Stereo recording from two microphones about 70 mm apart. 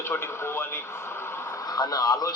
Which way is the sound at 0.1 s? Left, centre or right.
Left.